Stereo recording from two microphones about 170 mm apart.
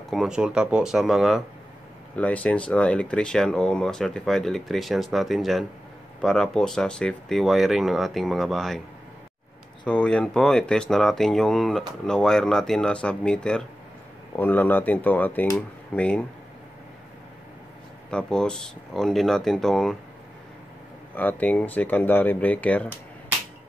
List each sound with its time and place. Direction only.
0.1 s speech: 5° right (ahead or behind)
9.8 s speech: 5° left (ahead or behind)
18.1 s speech: 5° left (ahead or behind)
21.1 s speech: 10° left (ahead or behind)